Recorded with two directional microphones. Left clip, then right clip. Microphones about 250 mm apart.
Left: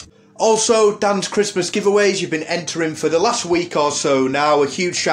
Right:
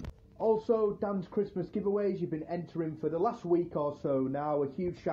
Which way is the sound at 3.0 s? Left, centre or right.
Left.